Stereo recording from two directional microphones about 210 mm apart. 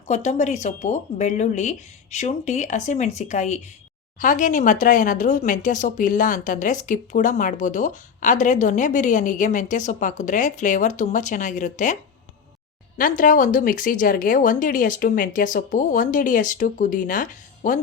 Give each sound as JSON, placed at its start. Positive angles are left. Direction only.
{"t": 0.1, "sound": "speech", "side_deg": 35}
{"t": 13.0, "sound": "speech", "side_deg": 40}